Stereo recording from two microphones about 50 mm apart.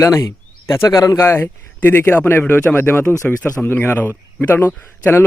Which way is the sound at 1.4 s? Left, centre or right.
Left.